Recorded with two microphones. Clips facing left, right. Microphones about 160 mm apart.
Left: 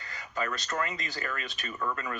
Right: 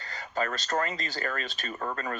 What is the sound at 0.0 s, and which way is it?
Speech, 30° right (ahead or behind).